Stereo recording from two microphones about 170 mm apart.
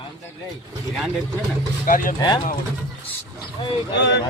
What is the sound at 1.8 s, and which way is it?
Speech, 55° left (ahead or behind).